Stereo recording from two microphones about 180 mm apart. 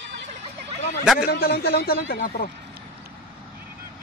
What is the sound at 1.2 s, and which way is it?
A man's voice, 55° left (ahead or behind).